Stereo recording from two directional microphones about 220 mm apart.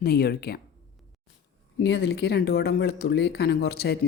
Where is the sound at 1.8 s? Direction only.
55° left (ahead or behind).